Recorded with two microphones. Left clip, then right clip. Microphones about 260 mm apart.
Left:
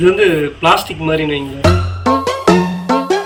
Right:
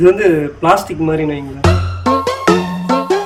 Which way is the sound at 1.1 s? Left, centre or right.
Centre.